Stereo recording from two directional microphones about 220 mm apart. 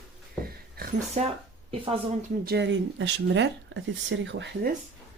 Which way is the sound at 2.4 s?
50° right (ahead or behind).